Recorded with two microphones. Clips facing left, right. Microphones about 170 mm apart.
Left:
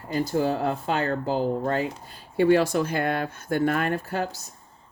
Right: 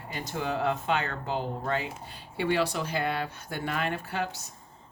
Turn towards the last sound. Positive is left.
turn(degrees=40)  # may be behind; listen again after turning